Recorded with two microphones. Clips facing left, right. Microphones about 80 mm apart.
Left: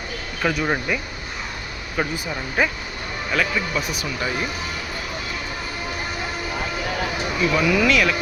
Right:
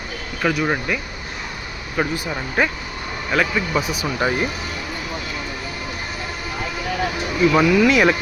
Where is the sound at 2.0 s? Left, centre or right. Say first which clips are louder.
Right 3 dB; centre.